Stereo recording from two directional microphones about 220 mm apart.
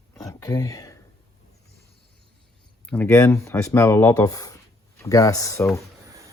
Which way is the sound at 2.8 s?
5° left (ahead or behind).